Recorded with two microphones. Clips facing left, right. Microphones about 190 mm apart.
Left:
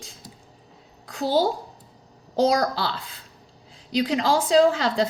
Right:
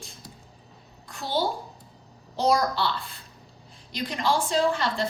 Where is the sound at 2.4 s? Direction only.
90° left.